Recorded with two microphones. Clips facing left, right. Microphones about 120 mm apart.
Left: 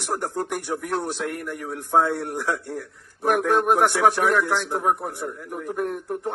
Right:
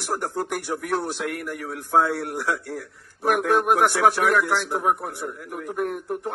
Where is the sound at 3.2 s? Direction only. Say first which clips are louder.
Even; 40° left (ahead or behind).